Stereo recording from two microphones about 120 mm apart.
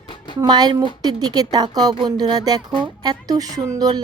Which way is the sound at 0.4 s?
35° right (ahead or behind).